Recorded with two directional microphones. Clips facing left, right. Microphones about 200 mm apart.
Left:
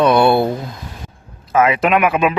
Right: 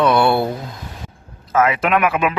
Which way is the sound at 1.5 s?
20° left (ahead or behind).